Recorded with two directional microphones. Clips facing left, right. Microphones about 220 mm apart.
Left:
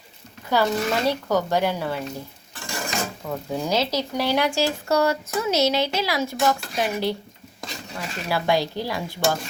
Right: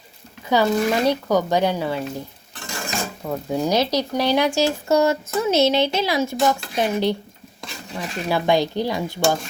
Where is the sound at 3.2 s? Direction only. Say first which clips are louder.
Right 4 dB; 15° right (ahead or behind).